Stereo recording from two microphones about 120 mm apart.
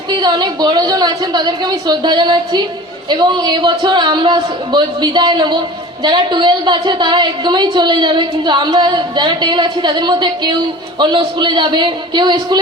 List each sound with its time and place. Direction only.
0.1 s a woman's voice: 40° right (ahead or behind)